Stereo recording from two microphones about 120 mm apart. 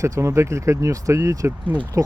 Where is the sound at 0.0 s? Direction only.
25° right (ahead or behind).